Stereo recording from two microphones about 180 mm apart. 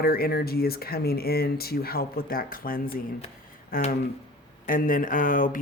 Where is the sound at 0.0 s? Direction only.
55° left (ahead or behind).